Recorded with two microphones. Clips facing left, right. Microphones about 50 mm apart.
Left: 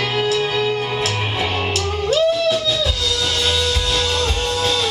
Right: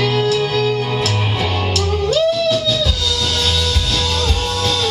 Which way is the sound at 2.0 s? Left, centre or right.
Centre.